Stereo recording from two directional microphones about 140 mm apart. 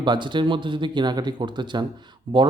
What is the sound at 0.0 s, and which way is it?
Speech, 35° right (ahead or behind).